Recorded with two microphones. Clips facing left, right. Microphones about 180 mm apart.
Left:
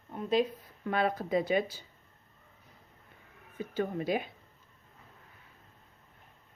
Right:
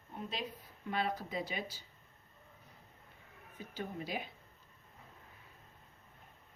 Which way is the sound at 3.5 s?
60° left (ahead or behind).